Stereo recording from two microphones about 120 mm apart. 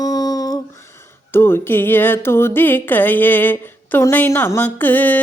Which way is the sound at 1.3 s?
20° left (ahead or behind).